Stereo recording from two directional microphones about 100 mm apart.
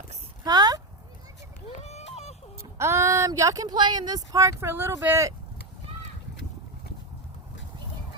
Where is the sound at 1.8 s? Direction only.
90° left.